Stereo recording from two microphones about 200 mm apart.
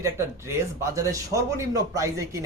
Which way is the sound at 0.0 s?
15° right (ahead or behind).